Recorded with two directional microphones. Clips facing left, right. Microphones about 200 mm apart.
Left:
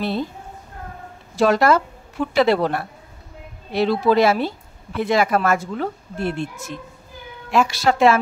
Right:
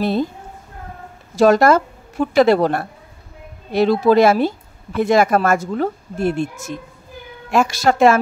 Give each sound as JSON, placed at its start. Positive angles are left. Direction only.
{"t": 1.3, "sound": "a woman's voice", "side_deg": -45}